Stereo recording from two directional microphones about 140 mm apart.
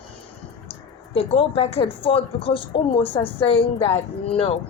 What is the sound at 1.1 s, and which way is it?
A woman's voice, 45° left (ahead or behind).